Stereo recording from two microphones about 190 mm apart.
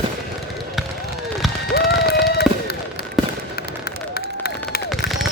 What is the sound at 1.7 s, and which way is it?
Fireworks, 60° left (ahead or behind).